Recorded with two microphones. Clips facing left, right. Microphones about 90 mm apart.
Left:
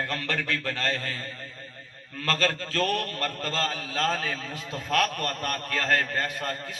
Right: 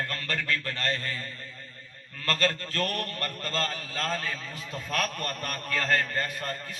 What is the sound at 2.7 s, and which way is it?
Speech, 90° left.